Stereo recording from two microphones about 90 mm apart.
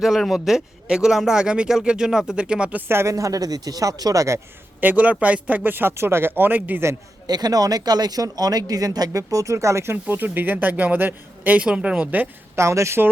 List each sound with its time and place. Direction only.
0.0 s speech: centre (ahead or behind); by 4.4 s 40° right (ahead or behind)
4.8 s speech: 15° right (ahead or behind)
7.3 s speech: 50° right (ahead or behind); by 12.3 s 15° right (ahead or behind)
12.5 s speech: 35° right (ahead or behind)